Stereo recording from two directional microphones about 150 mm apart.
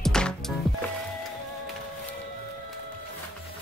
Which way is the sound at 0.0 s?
5° left (ahead or behind).